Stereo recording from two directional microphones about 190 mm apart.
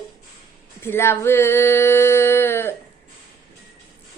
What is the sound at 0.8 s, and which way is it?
Female singing, 15° left (ahead or behind).